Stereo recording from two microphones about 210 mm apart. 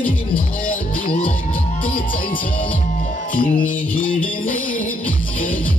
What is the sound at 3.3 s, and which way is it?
Music, 40° left (ahead or behind).